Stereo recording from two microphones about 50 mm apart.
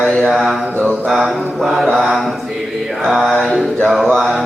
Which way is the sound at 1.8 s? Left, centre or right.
Centre.